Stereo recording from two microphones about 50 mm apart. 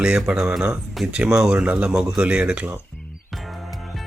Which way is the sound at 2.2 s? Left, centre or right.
Right.